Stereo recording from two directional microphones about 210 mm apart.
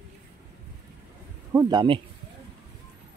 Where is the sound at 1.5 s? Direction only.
15° right (ahead or behind).